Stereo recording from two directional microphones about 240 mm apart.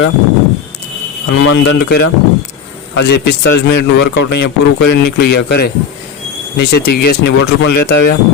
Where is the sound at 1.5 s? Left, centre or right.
Left.